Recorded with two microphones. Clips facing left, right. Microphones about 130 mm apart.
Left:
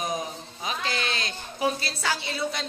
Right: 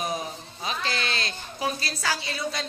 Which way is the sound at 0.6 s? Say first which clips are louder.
Even; 15° left (ahead or behind).